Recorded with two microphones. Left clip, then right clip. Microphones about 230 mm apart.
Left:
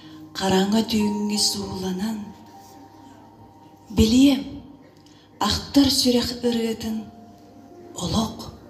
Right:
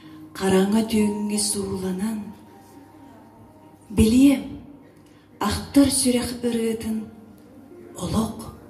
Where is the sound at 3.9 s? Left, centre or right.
Left.